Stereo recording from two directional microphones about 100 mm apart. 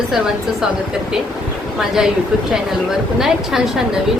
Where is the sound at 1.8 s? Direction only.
5° right (ahead or behind).